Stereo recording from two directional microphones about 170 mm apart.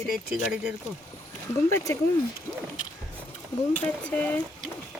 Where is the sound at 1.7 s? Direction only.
20° left (ahead or behind).